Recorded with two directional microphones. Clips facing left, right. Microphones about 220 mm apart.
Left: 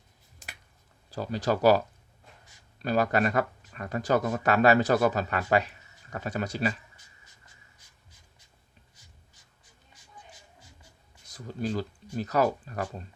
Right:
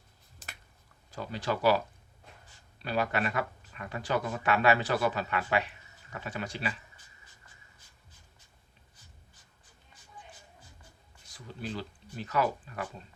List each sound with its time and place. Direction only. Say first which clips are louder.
1.1 s speech: left 5 dB; 40° left (ahead or behind)
11.3 s speech: left 7 dB; 40° left (ahead or behind)